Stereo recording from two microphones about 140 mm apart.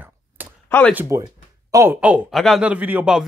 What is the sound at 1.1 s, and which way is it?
Speech, 20° right (ahead or behind).